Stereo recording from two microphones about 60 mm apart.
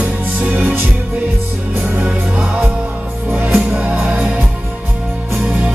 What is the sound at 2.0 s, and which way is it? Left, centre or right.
Music, right.